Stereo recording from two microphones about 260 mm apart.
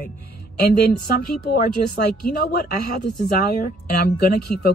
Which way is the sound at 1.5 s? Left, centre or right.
Left.